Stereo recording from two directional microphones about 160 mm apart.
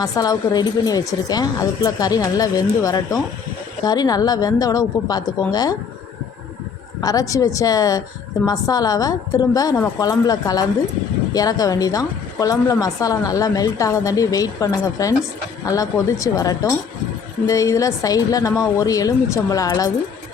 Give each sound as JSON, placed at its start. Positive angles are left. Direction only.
{"t": 0.0, "sound": "speech", "side_deg": 25}
{"t": 7.0, "sound": "speech", "side_deg": 20}